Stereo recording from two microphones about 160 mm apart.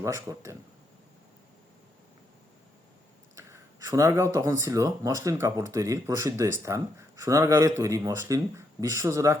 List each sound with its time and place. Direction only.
0.0 s speech: 20° right (ahead or behind)
3.3 s speech: 20° right (ahead or behind)